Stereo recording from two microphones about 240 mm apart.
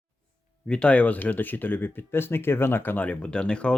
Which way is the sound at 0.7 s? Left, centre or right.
Centre.